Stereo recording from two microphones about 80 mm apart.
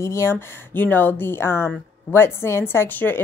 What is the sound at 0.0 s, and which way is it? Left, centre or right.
Speech, left.